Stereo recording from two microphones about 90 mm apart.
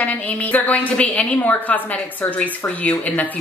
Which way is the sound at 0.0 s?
15° left (ahead or behind).